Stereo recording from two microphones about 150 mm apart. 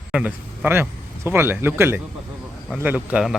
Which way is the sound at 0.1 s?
10° right (ahead or behind).